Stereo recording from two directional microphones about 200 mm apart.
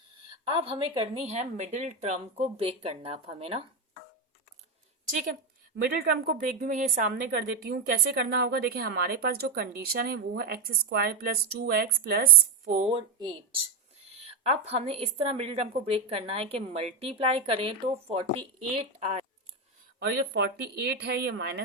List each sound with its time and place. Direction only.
0.3 s a woman's voice: 25° right (ahead or behind)
5.7 s a woman's voice: 50° right (ahead or behind)
12.9 s a woman's voice: 20° right (ahead or behind)
20.0 s speech: 55° right (ahead or behind)